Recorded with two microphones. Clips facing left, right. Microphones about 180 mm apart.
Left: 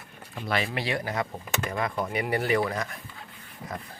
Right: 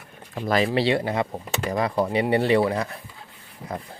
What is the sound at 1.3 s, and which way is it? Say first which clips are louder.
Speech: right 5 dB; 35° right (ahead or behind).